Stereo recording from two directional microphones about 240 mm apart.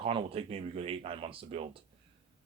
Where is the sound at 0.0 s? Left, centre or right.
Right.